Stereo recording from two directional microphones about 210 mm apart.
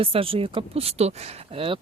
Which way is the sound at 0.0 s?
25° right (ahead or behind).